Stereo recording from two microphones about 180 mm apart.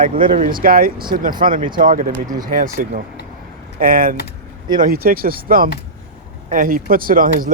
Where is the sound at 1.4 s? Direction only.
35° right (ahead or behind).